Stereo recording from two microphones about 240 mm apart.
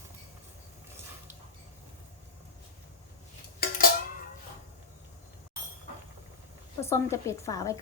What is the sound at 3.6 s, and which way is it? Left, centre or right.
Music, left.